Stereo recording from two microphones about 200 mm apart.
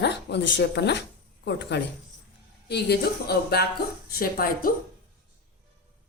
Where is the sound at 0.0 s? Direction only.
55° left (ahead or behind).